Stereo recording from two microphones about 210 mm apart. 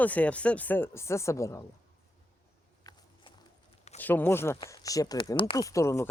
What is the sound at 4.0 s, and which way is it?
Speech, 10° left (ahead or behind).